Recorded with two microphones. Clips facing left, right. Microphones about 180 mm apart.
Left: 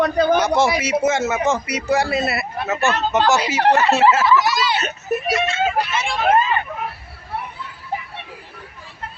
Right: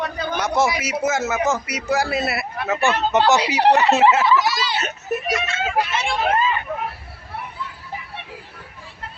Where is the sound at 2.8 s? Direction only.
15° right (ahead or behind).